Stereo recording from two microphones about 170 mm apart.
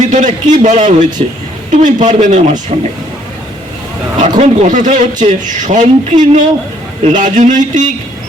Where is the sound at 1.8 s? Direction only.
50° right (ahead or behind).